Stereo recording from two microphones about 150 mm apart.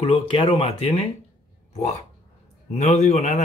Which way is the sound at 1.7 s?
55° left (ahead or behind).